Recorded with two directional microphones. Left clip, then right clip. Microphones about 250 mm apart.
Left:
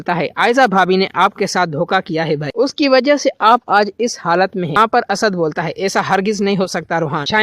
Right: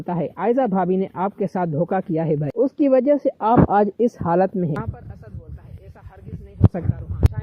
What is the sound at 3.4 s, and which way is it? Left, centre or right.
Speech, centre.